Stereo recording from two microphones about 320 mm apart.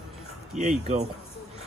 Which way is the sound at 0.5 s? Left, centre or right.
Right.